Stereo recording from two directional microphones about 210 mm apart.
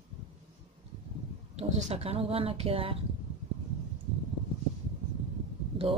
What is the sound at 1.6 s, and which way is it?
Speech, 30° right (ahead or behind).